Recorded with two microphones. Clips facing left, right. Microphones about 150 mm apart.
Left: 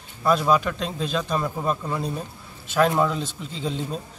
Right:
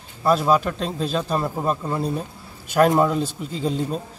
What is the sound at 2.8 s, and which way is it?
Speech, 40° right (ahead or behind).